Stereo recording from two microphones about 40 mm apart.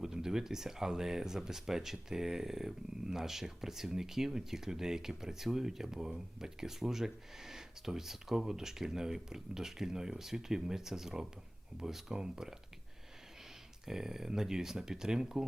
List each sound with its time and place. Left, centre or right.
0.0 s speech: centre
13.8 s speech: centre